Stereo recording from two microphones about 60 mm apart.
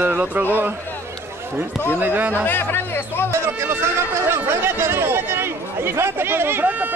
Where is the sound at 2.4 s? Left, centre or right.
Left.